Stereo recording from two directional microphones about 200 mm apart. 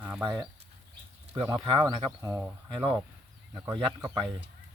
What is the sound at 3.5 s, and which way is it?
Speech, 20° right (ahead or behind).